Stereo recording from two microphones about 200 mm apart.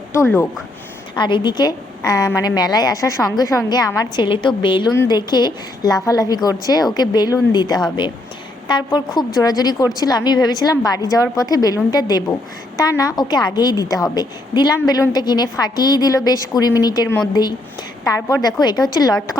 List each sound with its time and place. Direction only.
0.1 s speech: 10° left (ahead or behind)
1.1 s a woman's voice: 25° left (ahead or behind)